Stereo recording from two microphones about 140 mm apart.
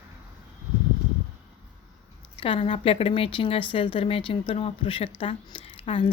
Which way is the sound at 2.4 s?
40° left (ahead or behind).